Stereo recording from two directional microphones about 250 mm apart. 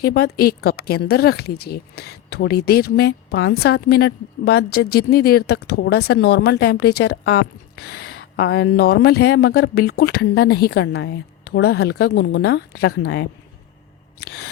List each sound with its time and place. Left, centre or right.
0.0 s a woman's voice: left